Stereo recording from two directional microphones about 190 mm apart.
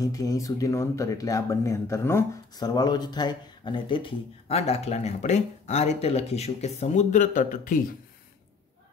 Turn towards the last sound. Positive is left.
turn(degrees=45)  # may be behind; listen again after turning